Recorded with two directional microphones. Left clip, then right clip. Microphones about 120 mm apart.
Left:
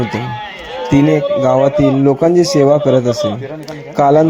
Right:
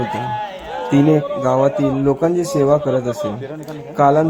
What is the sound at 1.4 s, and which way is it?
Speech, 25° left (ahead or behind).